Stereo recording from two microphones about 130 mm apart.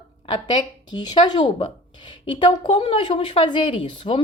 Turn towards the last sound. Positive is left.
turn(degrees=40)  # may be behind; listen again after turning